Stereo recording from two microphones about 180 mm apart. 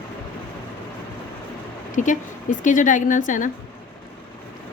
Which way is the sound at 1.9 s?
45° left (ahead or behind).